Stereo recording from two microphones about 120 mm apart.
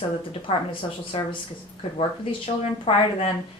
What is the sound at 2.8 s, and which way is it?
Speech, 55° left (ahead or behind).